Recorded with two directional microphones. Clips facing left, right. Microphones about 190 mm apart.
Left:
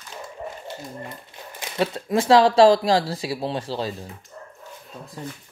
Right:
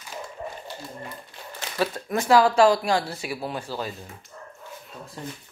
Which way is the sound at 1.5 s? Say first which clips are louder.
Left 2 dB; 25° left (ahead or behind).